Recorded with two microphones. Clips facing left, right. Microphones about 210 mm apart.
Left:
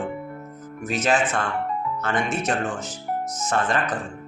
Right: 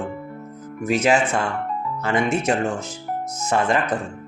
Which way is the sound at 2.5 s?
25° right (ahead or behind).